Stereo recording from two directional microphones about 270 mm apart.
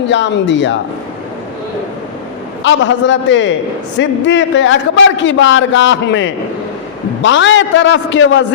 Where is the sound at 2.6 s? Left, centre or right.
Left.